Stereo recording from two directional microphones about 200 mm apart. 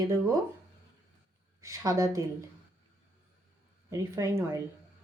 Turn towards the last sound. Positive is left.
turn(degrees=-15)  # may be behind; listen again after turning